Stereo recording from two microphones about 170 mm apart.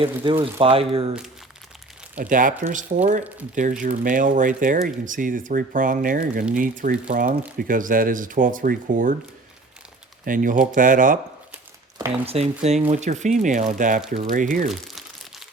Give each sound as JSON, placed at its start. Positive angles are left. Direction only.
{"t": 0.2, "sound": "speech", "side_deg": -25}
{"t": 2.1, "sound": "speech", "side_deg": -50}
{"t": 10.2, "sound": "speech", "side_deg": -50}
{"t": 11.9, "sound": "speech", "side_deg": -35}
{"t": 14.7, "sound": "crumpling", "side_deg": 0}